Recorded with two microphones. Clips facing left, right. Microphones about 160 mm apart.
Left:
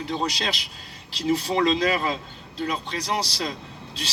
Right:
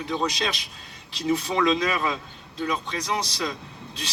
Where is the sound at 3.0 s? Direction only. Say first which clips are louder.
Left 1 dB; 30° left (ahead or behind).